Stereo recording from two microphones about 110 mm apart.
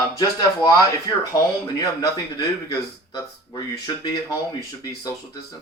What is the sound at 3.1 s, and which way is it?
Speech, 35° left (ahead or behind).